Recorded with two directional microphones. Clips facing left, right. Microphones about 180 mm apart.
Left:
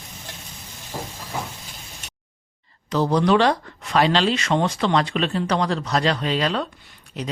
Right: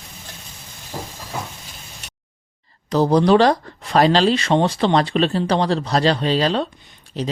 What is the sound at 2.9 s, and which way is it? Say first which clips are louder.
Speech: right 4 dB; 35° right (ahead or behind).